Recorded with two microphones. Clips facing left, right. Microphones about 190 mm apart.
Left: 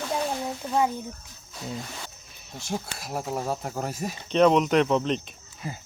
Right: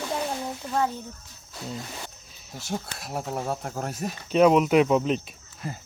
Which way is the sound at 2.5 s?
Centre (ahead or behind).